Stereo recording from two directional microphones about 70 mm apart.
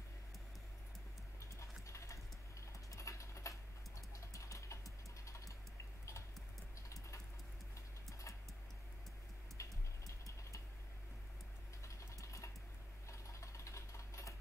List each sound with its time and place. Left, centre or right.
1.4 s a sound: left
2.9 s typing: left
8.1 s music: left
9.6 s music: left
11.8 s a sound: left
13.1 s sewing machine: left